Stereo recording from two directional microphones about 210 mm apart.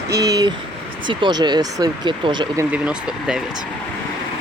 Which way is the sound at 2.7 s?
5° right (ahead or behind).